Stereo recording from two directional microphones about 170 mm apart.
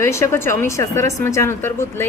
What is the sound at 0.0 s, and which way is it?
Speech, 15° left (ahead or behind).